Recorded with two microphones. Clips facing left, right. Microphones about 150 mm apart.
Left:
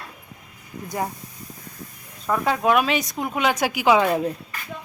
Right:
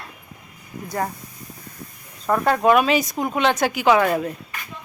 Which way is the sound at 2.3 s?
Centre (ahead or behind).